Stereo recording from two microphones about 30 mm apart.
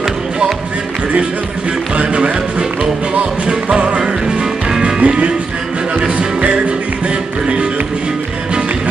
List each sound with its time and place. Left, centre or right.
3.6 s music: right
4.0 s music: right
5.0 s music: right